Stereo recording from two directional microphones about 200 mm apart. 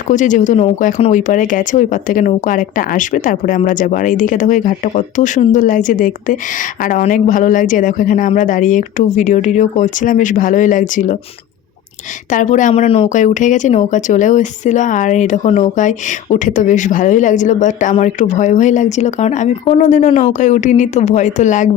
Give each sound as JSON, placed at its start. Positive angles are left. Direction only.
{"t": 0.1, "sound": "speech", "side_deg": 40}
{"t": 12.3, "sound": "speech", "side_deg": 40}